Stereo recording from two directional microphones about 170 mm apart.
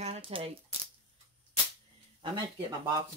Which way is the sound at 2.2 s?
25° right (ahead or behind).